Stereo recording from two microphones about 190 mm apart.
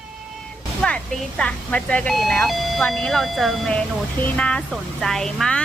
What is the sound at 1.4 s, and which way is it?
Speech, 5° left (ahead or behind).